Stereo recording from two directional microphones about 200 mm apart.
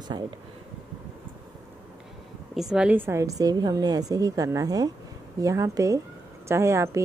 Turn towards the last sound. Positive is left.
turn(degrees=-15)  # may be behind; listen again after turning